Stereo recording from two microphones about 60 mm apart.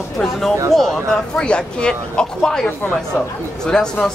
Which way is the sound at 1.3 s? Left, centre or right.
Centre.